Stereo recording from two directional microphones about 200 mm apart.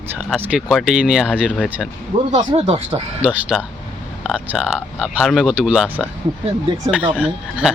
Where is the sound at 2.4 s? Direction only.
30° right (ahead or behind).